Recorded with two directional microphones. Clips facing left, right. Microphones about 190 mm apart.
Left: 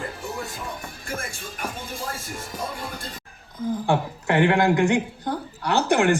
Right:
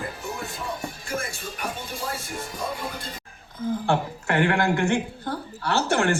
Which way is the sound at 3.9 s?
20° left (ahead or behind).